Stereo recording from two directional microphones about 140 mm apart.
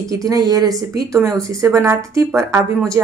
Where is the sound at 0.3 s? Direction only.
30° right (ahead or behind).